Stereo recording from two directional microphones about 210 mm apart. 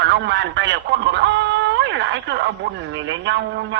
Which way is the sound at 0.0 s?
55° right (ahead or behind).